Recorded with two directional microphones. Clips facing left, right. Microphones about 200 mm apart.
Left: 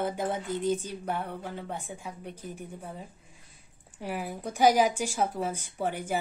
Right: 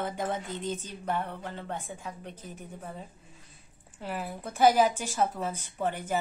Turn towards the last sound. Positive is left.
turn(degrees=10)  # may be behind; listen again after turning